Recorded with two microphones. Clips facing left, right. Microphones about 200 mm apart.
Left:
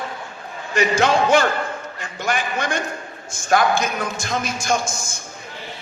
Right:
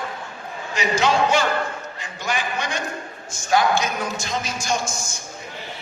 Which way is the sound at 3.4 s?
50° left (ahead or behind).